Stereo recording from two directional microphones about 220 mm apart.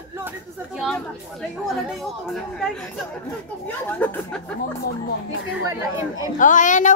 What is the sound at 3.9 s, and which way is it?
Speech, 10° left (ahead or behind).